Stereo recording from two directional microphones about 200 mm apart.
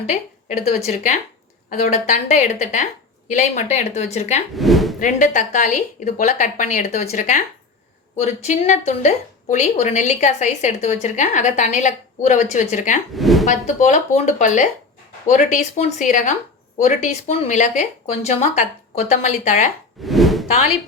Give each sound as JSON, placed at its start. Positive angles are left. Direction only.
{"t": 0.1, "sound": "a woman's voice", "side_deg": 35}
{"t": 4.5, "sound": "speech", "side_deg": 0}
{"t": 4.9, "sound": "a woman's voice", "side_deg": 40}
{"t": 13.1, "sound": "speech", "side_deg": 0}
{"t": 13.4, "sound": "a woman's voice", "side_deg": 35}
{"t": 20.0, "sound": "a sound", "side_deg": 0}